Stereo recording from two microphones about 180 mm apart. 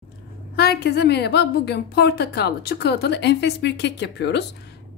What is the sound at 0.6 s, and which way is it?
A woman's voice, 60° left (ahead or behind).